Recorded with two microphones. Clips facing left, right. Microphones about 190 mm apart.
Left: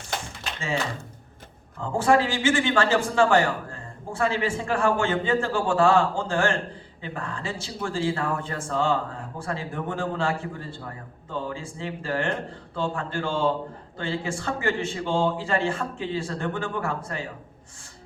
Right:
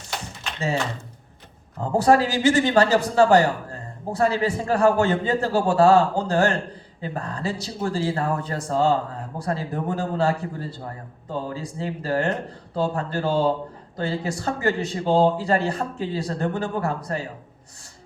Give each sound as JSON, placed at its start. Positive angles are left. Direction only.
{"t": 1.8, "sound": "a man's voice", "side_deg": -40}